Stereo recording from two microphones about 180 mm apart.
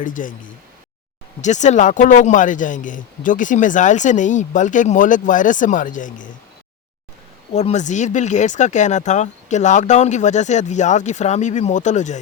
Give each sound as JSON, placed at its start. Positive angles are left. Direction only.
{"t": 0.0, "sound": "speech", "side_deg": 45}
{"t": 1.4, "sound": "speech", "side_deg": 40}
{"t": 7.5, "sound": "speech", "side_deg": 40}